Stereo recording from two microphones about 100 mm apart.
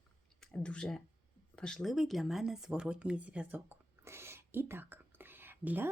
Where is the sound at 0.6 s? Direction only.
10° left (ahead or behind).